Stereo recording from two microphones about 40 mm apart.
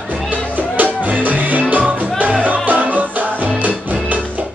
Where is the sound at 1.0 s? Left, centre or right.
Right.